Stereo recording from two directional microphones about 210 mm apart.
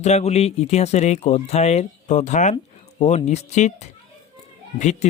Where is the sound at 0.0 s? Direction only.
30° left (ahead or behind).